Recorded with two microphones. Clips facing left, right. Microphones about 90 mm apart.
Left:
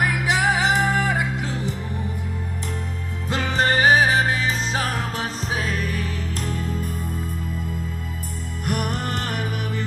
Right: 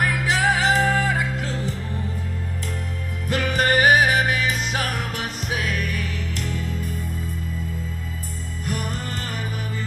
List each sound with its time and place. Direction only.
0.0 s music: 20° left (ahead or behind)
3.3 s music: 25° left (ahead or behind); by 6.9 s 45° left (ahead or behind)
8.6 s music: 60° left (ahead or behind)